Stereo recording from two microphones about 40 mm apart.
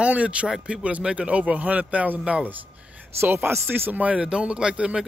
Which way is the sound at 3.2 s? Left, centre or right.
Right.